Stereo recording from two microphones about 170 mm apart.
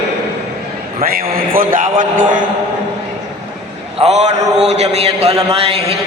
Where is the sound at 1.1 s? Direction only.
60° right (ahead or behind).